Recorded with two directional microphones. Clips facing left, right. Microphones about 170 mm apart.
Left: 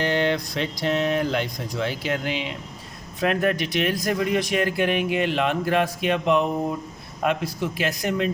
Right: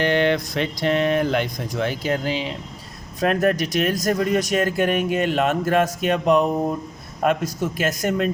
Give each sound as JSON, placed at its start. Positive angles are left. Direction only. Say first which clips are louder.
{"t": 0.0, "sound": "speech", "louder": "right 3 dB", "side_deg": -60}